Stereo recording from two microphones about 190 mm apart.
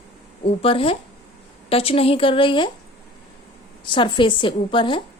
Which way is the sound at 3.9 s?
25° left (ahead or behind).